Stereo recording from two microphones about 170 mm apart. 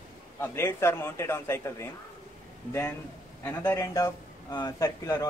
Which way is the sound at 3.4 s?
15° left (ahead or behind).